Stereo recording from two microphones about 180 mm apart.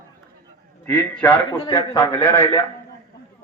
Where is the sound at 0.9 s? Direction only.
10° left (ahead or behind).